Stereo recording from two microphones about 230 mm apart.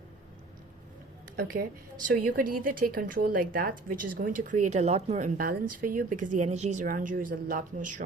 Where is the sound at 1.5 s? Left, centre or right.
Right.